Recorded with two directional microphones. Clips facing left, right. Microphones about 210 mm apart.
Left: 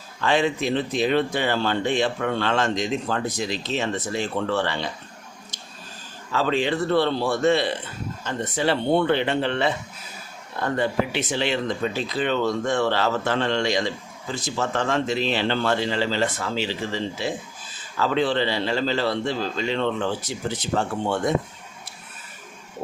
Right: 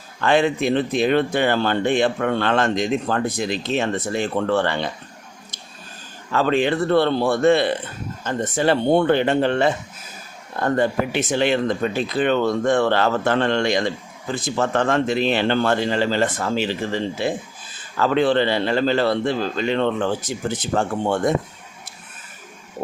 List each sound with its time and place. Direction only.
0.2 s speech: 55° right (ahead or behind)
6.3 s speech: 55° right (ahead or behind)